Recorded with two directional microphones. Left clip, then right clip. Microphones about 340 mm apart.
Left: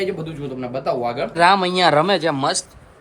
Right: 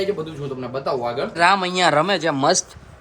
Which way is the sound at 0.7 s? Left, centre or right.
Centre.